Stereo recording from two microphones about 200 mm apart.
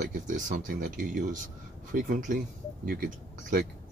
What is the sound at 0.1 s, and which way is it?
Speech, 40° right (ahead or behind).